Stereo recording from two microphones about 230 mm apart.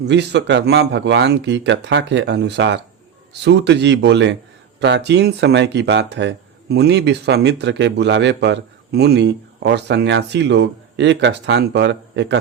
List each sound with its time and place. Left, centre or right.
0.0 s speech: right